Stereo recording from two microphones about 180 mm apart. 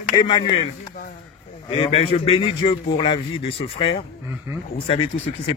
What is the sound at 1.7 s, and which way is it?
A man's voice, 30° left (ahead or behind).